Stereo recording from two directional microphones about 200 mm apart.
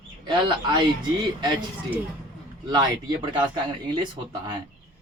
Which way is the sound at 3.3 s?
25° right (ahead or behind).